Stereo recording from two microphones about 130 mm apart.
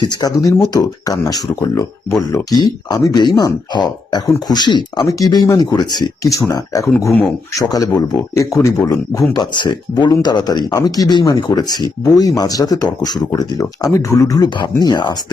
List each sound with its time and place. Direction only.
0.0 s speech: 30° left (ahead or behind)